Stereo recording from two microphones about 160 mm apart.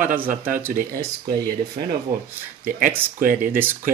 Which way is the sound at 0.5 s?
15° right (ahead or behind).